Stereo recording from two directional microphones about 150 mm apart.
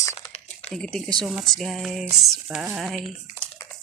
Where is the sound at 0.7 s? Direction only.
5° left (ahead or behind).